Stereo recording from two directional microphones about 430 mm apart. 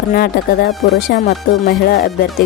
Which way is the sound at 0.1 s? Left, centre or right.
Left.